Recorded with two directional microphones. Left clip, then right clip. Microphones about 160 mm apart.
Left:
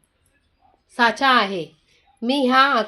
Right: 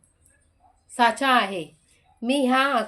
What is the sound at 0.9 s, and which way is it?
Speech, 35° left (ahead or behind).